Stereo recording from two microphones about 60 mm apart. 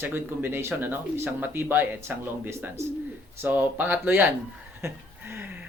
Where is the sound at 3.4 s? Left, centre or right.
Right.